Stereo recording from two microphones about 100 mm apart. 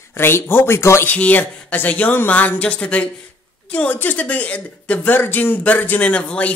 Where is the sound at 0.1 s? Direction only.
25° left (ahead or behind).